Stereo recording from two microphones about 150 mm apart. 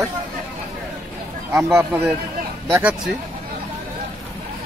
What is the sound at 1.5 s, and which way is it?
Speech, 15° right (ahead or behind).